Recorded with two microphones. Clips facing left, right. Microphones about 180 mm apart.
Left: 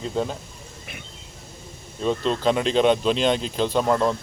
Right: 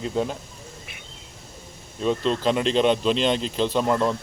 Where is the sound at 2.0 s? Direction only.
Centre (ahead or behind).